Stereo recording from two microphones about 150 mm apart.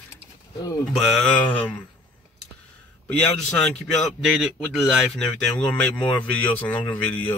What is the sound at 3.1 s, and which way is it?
A man's voice, 5° left (ahead or behind).